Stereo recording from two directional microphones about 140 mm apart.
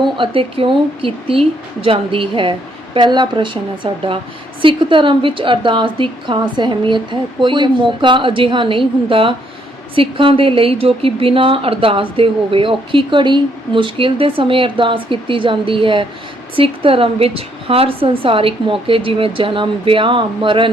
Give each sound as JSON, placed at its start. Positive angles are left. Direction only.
{"t": 0.0, "sound": "speech", "side_deg": -40}